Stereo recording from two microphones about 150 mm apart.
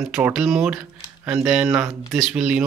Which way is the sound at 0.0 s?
5° right (ahead or behind).